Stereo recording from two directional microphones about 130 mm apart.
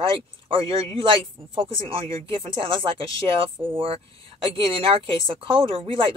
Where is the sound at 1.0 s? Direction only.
40° right (ahead or behind).